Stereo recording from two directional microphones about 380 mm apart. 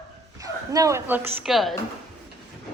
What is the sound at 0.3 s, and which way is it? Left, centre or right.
A woman's voice, centre.